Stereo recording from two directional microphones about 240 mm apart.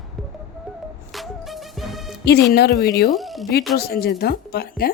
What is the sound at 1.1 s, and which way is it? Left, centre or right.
Music, centre.